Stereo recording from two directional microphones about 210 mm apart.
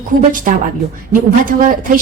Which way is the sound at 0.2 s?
40° right (ahead or behind).